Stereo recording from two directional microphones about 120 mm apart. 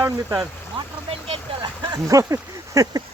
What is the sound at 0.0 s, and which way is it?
Speech, 30° right (ahead or behind).